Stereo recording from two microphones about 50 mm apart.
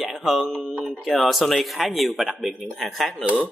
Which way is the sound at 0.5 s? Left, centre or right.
Right.